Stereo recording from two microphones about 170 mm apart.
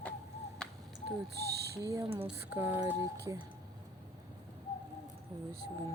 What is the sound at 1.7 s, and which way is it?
Speech, 20° right (ahead or behind).